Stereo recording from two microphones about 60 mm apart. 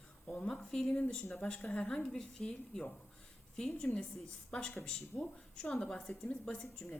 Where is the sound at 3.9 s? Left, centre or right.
Centre.